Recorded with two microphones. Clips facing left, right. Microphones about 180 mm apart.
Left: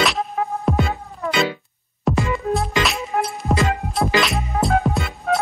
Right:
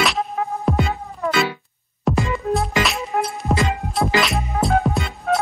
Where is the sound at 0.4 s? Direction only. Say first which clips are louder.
Left 3 dB; centre (ahead or behind).